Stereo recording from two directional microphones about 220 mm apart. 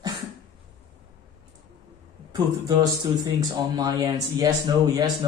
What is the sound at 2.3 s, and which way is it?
Speech, 20° right (ahead or behind).